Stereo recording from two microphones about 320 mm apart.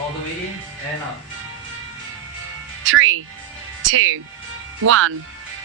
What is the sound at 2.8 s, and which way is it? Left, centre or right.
Speech, right.